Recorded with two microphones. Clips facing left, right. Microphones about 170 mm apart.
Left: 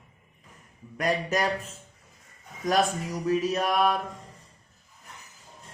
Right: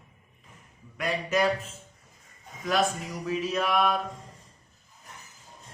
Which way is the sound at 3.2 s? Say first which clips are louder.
Left 3 dB; 45° left (ahead or behind).